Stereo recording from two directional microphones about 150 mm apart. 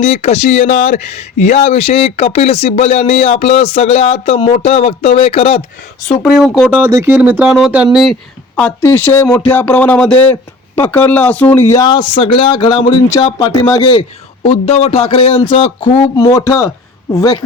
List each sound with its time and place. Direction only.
0.0 s speech: 45° left (ahead or behind)
6.2 s speech: 5° right (ahead or behind)
6.7 s speech: 15° right (ahead or behind)
8.5 s speech: 10° left (ahead or behind)
14.4 s speech: 40° left (ahead or behind)
16.1 s speech: 20° left (ahead or behind)